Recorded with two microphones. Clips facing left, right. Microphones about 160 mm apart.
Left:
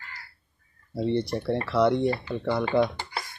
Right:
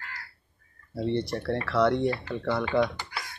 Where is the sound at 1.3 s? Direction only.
15° left (ahead or behind).